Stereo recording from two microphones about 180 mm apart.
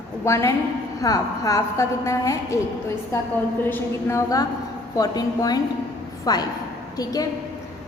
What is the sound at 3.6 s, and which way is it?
A woman's voice, 15° left (ahead or behind).